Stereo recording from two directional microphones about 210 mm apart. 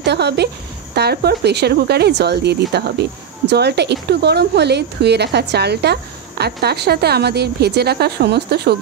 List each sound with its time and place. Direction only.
0.0 s speech: 55° right (ahead or behind)